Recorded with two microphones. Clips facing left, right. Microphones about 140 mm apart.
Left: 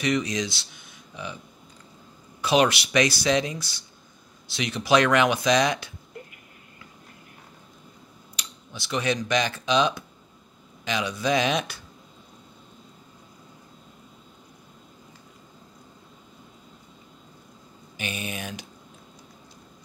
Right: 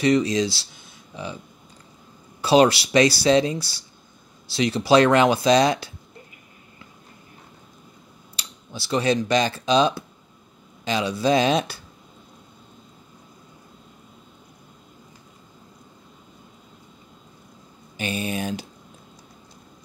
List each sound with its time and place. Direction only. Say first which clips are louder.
0.0 s speech: right 6 dB; 30° right (ahead or behind)
2.4 s speech: right 5 dB; 35° right (ahead or behind)
8.4 s speech: right 4 dB; 35° right (ahead or behind)
17.9 s speech: right 6 dB; 35° right (ahead or behind)